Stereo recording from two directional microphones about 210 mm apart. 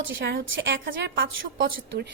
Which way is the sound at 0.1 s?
60° right (ahead or behind).